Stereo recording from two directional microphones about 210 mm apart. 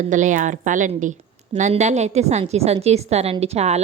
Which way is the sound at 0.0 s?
35° right (ahead or behind).